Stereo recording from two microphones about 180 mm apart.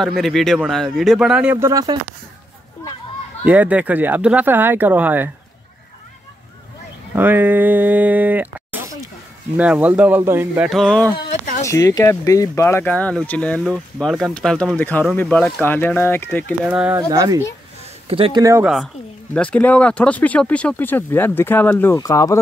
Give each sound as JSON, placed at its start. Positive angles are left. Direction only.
{"t": 0.0, "sound": "speech", "side_deg": 0}
{"t": 3.4, "sound": "speech", "side_deg": -10}
{"t": 7.2, "sound": "speech", "side_deg": -10}
{"t": 10.7, "sound": "speech", "side_deg": 5}
{"t": 11.6, "sound": "speech", "side_deg": 20}
{"t": 16.6, "sound": "speech", "side_deg": -10}
{"t": 17.1, "sound": "speech", "side_deg": -20}
{"t": 18.4, "sound": "speech", "side_deg": -15}
{"t": 19.3, "sound": "speech", "side_deg": 5}